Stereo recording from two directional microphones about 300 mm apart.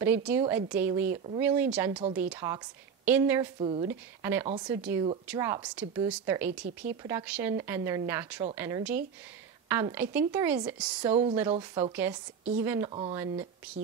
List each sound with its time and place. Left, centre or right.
0.0 s a woman's voice: centre
1.1 s speech: right
1.4 s a woman's voice: centre
3.5 s speech: centre
3.8 s a woman's voice: centre
6.6 s speech: right
7.0 s a woman's voice: centre
11.0 s a woman's voice: centre
11.9 s a woman's voice: centre
12.9 s speech: centre